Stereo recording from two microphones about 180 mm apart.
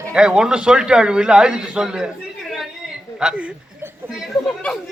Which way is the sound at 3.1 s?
5° right (ahead or behind).